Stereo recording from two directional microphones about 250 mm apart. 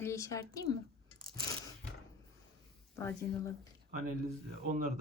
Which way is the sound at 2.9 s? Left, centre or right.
Centre.